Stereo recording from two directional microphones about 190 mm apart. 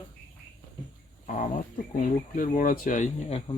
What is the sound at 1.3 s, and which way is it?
Speech, 45° left (ahead or behind).